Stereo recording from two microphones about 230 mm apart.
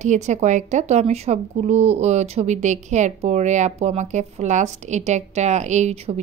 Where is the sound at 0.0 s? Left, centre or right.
Right.